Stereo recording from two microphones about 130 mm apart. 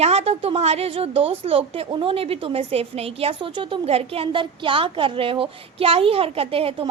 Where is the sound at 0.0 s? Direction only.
55° right (ahead or behind).